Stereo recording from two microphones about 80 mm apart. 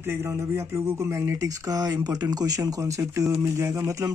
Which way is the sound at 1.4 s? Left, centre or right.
Right.